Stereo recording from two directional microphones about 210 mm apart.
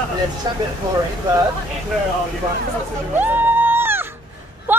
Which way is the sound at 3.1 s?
10° right (ahead or behind).